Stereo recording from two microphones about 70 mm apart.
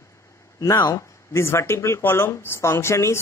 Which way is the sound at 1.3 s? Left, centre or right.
Left.